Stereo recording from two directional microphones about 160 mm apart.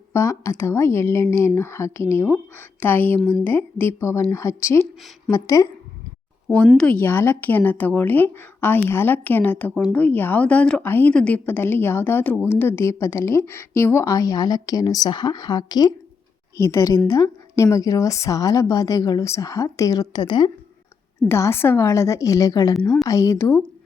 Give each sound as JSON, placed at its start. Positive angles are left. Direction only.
{"t": 0.1, "sound": "a woman's voice", "side_deg": 20}
{"t": 6.7, "sound": "a woman's voice", "side_deg": 10}
{"t": 21.2, "sound": "a woman's voice", "side_deg": 15}